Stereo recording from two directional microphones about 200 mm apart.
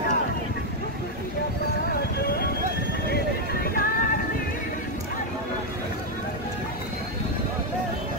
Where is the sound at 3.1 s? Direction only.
45° left (ahead or behind).